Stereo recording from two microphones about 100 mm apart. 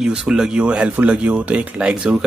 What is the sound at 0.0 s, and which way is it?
Speech, 5° right (ahead or behind).